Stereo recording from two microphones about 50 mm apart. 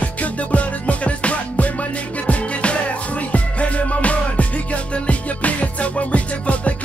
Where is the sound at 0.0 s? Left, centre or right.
Left.